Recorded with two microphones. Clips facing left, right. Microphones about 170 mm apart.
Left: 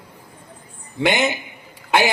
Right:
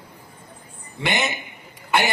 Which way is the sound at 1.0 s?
90° left.